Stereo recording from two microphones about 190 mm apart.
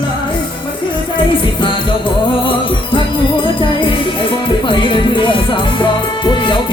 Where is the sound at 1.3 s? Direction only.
25° left (ahead or behind).